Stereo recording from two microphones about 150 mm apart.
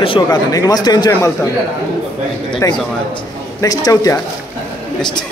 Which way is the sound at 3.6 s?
25° left (ahead or behind).